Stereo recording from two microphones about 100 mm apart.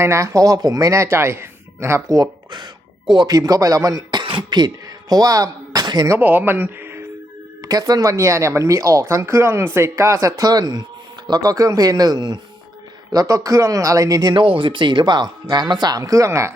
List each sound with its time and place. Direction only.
0.0 s speech: 30° right (ahead or behind)
2.0 s speech: 40° right (ahead or behind)
4.2 s cough: 60° right (ahead or behind)
4.4 s speech: 40° right (ahead or behind)
6.1 s speech: 20° right (ahead or behind)
7.6 s speech: 40° right (ahead or behind)
14.3 s speech: 60° right (ahead or behind); by 16.6 s 30° right (ahead or behind)